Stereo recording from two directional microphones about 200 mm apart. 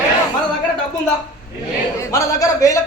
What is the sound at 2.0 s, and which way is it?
Speech, 15° left (ahead or behind).